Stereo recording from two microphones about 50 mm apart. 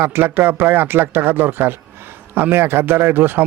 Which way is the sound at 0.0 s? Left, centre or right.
Right.